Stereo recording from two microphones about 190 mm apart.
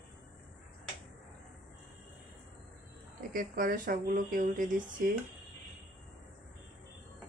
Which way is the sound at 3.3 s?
45° right (ahead or behind).